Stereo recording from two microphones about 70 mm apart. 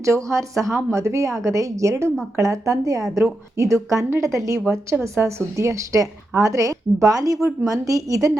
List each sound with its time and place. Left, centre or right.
0.0 s a woman's voice: right